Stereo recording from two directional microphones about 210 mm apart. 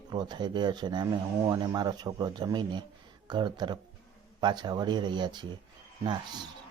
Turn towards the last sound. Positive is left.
turn(degrees=-20)  # may be behind; listen again after turning